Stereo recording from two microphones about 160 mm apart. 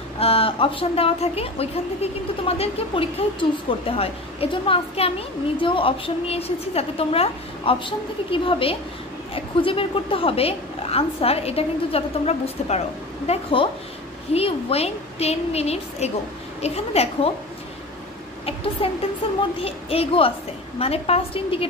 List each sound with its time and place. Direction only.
0.2 s a woman's voice: 35° left (ahead or behind)
18.4 s a woman's voice: 35° left (ahead or behind)